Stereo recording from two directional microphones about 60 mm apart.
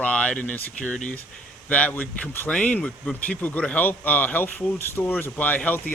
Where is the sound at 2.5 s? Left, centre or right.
Left.